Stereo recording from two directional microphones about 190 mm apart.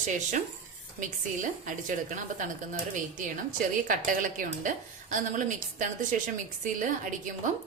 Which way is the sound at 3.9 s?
45° right (ahead or behind).